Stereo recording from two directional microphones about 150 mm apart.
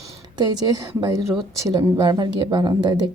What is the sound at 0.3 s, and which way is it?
A woman's voice, 25° right (ahead or behind).